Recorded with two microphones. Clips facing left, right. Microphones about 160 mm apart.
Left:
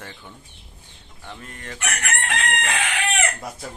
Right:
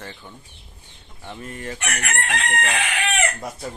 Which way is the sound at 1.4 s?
10° right (ahead or behind).